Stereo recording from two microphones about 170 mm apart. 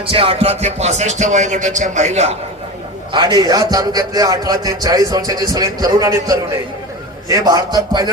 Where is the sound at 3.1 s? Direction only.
25° right (ahead or behind).